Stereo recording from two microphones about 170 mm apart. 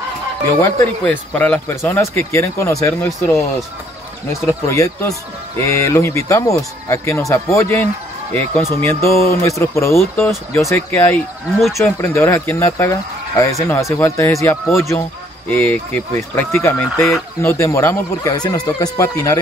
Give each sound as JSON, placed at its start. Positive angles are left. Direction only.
{"t": 0.6, "sound": "speech", "side_deg": 15}
{"t": 4.3, "sound": "speech", "side_deg": 15}
{"t": 8.8, "sound": "speech", "side_deg": 15}
{"t": 17.4, "sound": "speech", "side_deg": 15}